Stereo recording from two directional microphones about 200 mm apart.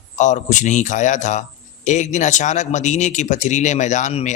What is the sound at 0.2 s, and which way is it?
Speech, 40° left (ahead or behind).